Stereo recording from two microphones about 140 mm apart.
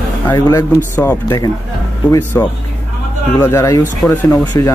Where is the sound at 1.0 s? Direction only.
15° left (ahead or behind).